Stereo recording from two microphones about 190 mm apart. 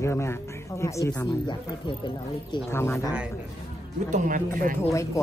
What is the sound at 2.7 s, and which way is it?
Speech, 15° left (ahead or behind).